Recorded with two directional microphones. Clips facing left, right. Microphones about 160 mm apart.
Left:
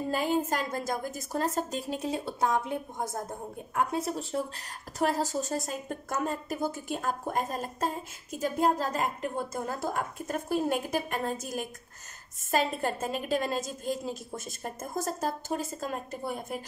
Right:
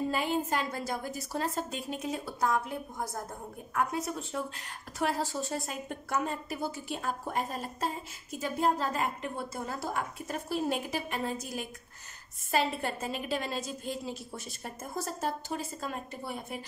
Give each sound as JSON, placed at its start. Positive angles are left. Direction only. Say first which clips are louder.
{"t": 0.1, "sound": "a woman's voice", "louder": "left 2 dB", "side_deg": 45}